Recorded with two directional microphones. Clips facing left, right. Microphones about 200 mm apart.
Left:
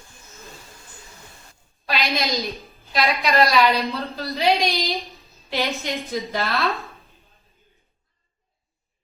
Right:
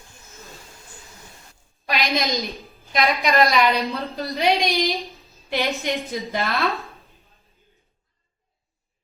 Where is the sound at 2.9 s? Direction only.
15° right (ahead or behind).